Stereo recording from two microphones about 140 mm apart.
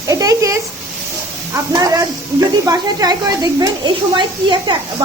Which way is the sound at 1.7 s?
25° right (ahead or behind).